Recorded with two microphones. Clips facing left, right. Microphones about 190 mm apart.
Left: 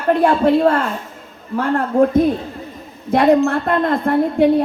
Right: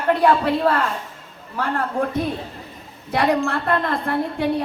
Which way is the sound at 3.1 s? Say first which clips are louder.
Left 7 dB; 45° left (ahead or behind).